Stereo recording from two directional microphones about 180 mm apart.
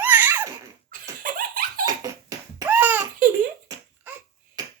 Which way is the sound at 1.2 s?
50° right (ahead or behind).